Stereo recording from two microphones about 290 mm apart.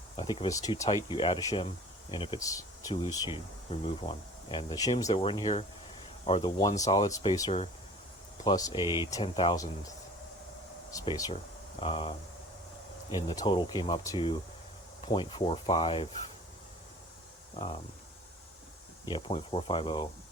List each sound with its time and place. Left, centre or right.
0.2 s speech: centre
10.9 s speech: centre
19.0 s speech: centre